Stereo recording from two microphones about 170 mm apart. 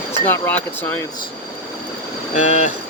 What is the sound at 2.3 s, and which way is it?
Speech, 45° left (ahead or behind).